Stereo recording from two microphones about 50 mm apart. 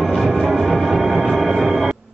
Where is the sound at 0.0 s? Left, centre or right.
Centre.